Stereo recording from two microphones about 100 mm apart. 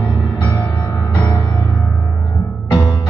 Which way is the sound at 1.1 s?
35° left (ahead or behind).